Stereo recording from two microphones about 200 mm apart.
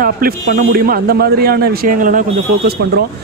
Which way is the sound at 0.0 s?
45° right (ahead or behind).